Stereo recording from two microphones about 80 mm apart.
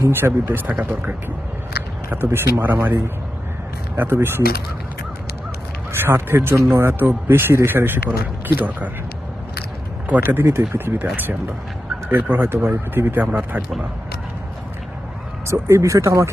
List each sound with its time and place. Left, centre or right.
0.0 s speech: right
3.9 s speech: right
5.9 s speech: right
10.1 s speech: right
15.4 s speech: right